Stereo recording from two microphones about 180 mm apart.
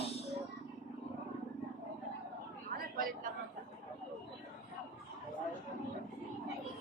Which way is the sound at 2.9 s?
50° right (ahead or behind).